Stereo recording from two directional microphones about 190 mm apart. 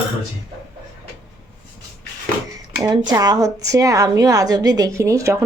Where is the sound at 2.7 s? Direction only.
20° right (ahead or behind).